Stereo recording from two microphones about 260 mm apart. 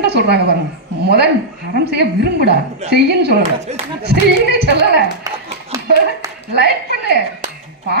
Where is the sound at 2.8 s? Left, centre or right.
Right.